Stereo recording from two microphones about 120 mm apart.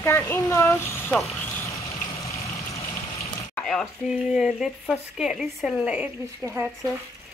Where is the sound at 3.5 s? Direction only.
5° left (ahead or behind).